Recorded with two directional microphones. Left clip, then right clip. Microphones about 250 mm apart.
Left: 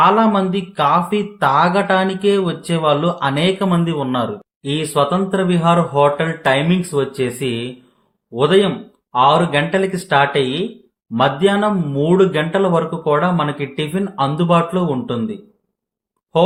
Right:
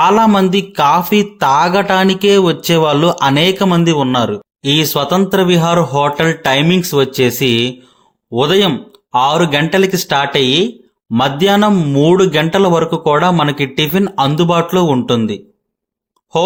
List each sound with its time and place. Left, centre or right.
0.0 s speech: right